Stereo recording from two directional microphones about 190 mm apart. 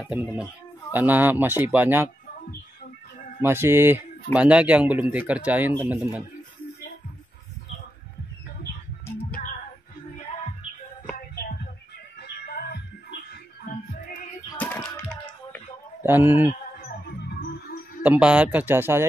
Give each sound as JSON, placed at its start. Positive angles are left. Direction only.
{"t": 0.0, "sound": "speech", "side_deg": -5}
{"t": 3.4, "sound": "speech", "side_deg": -10}
{"t": 9.0, "sound": "music", "side_deg": 10}
{"t": 11.1, "sound": "music", "side_deg": 55}
{"t": 14.6, "sound": "a sound", "side_deg": 5}
{"t": 16.0, "sound": "speech", "side_deg": -10}
{"t": 18.0, "sound": "speech", "side_deg": -5}